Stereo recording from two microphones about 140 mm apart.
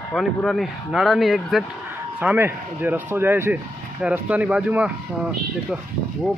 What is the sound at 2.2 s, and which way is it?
Speech, 15° right (ahead or behind).